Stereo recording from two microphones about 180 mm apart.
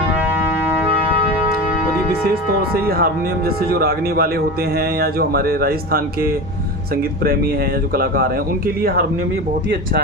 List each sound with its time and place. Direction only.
2.2 s speech: 55° right (ahead or behind)
7.9 s speech: 55° right (ahead or behind)